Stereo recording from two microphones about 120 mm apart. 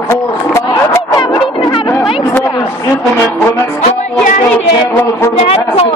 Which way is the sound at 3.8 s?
90° left.